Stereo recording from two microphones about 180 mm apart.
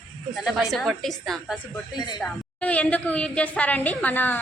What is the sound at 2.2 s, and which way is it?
A woman's voice, 5° left (ahead or behind).